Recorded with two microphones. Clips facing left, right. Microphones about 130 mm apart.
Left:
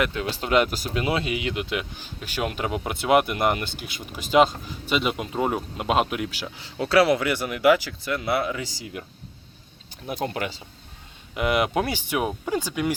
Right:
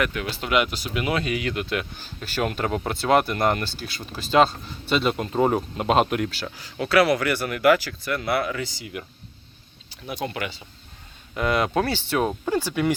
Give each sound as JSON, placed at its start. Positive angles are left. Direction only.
{"t": 0.0, "sound": "speech", "side_deg": 25}
{"t": 6.5, "sound": "speech", "side_deg": 25}
{"t": 9.9, "sound": "speech", "side_deg": 45}
{"t": 10.2, "sound": "speech", "side_deg": 35}
{"t": 11.3, "sound": "speech", "side_deg": 15}